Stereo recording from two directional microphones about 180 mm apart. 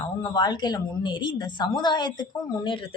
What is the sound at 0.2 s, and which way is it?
A woman's voice, 25° left (ahead or behind).